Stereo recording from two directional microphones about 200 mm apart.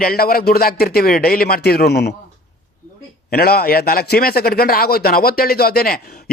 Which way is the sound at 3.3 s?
50° left (ahead or behind).